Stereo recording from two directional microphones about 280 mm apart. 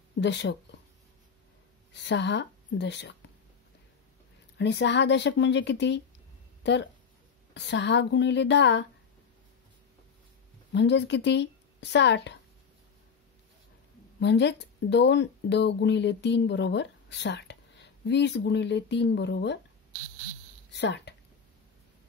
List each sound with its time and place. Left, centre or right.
0.2 s speech: left
2.0 s speech: left
4.6 s speech: left
10.7 s speech: left
14.2 s speech: left
20.7 s speech: left